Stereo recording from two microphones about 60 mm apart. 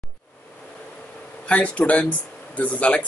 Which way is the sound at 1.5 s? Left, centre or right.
Left.